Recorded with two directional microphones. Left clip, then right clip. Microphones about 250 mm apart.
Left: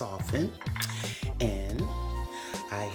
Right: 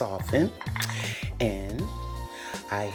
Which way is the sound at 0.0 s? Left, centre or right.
Centre.